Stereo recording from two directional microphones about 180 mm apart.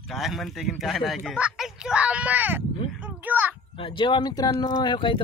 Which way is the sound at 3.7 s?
30° left (ahead or behind).